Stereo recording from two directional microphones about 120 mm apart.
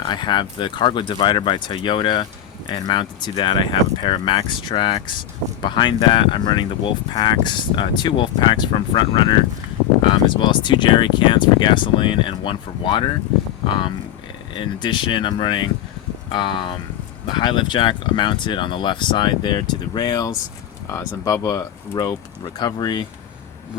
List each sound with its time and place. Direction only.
0.0 s speech: 40° left (ahead or behind)
14.8 s speech: 40° left (ahead or behind)